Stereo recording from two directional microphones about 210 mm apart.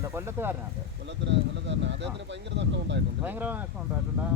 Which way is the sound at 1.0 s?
60° right (ahead or behind).